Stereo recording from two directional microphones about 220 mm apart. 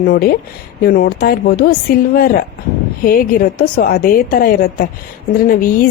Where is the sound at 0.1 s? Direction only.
40° left (ahead or behind).